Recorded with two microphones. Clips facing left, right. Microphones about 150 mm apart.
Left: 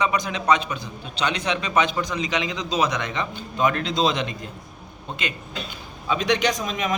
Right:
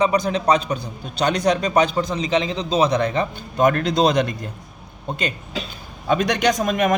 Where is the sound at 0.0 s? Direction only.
35° right (ahead or behind).